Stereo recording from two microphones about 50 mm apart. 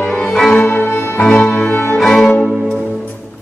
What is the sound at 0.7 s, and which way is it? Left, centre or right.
Music, left.